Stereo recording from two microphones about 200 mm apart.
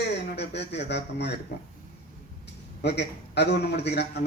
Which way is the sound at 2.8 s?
55° left (ahead or behind).